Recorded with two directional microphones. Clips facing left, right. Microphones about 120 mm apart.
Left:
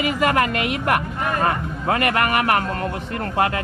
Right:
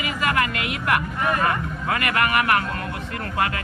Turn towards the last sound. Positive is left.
turn(degrees=30)  # may be behind; listen again after turning